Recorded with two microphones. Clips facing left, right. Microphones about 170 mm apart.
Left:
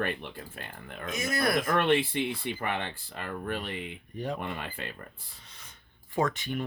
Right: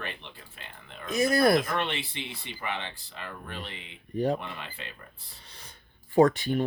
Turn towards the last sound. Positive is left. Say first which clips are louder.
# right 8 dB
turn(degrees=-35)  # may be behind; listen again after turning